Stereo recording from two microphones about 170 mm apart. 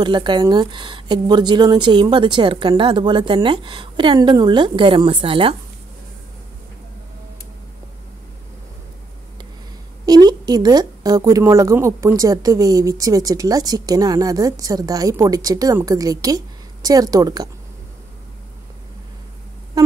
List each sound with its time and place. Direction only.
0.0 s speech: 25° right (ahead or behind)
10.0 s speech: 25° right (ahead or behind)